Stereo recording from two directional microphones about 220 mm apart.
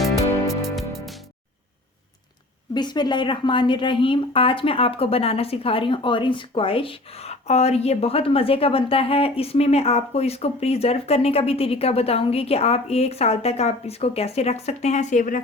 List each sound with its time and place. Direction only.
0.4 s music: centre (ahead or behind)
2.7 s a woman's voice: 20° left (ahead or behind); by 15.4 s 35° left (ahead or behind)